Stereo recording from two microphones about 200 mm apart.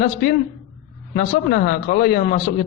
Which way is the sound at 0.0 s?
50° left (ahead or behind).